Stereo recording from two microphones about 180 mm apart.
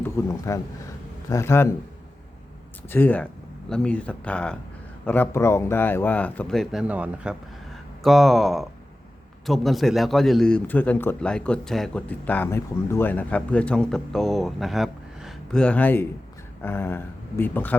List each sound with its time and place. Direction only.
0.0 s a man's voice: 15° left (ahead or behind)
2.9 s a man's voice: 10° left (ahead or behind)